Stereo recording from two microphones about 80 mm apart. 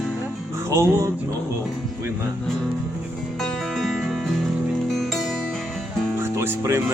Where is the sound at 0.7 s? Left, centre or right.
Right.